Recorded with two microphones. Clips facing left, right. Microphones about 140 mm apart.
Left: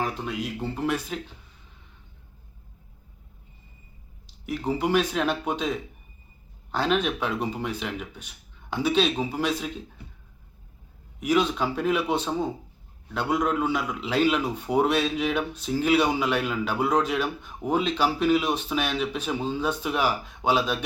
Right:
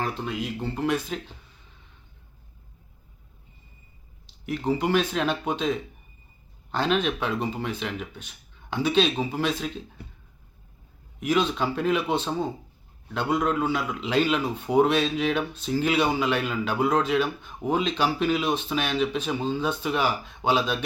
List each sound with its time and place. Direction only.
0.0 s speech: 5° left (ahead or behind)
4.4 s speech: 10° left (ahead or behind)
11.2 s speech: 5° left (ahead or behind)